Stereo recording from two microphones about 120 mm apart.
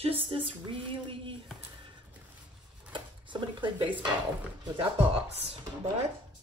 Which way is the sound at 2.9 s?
40° right (ahead or behind).